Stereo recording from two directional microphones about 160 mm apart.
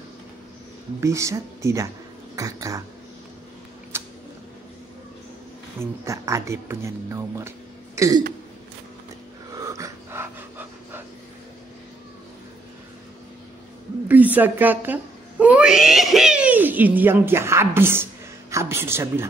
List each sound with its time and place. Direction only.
1.0 s speech: 20° right (ahead or behind)
3.9 s a sound: 15° right (ahead or behind)
5.8 s speech: 20° right (ahead or behind)
9.5 s dog: 20° right (ahead or behind)
14.0 s a man's voice: 10° right (ahead or behind)